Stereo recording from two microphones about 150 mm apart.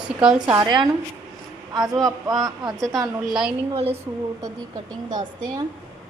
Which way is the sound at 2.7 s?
Centre (ahead or behind).